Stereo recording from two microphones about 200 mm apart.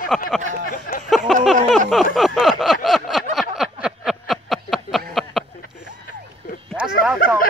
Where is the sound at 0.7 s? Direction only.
45° left (ahead or behind).